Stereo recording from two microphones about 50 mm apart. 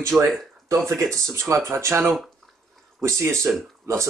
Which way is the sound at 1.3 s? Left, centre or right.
Right.